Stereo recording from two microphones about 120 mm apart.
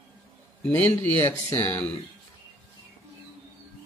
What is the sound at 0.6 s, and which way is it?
Speech, 15° left (ahead or behind).